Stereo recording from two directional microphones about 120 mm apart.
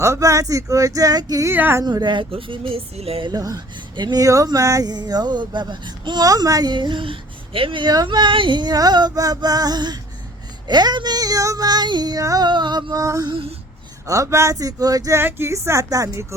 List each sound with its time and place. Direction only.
0.0 s speech: 25° right (ahead or behind)
1.5 s speech: 15° right (ahead or behind)
1.8 s speech: 35° right (ahead or behind)
3.3 s speech: 30° right (ahead or behind)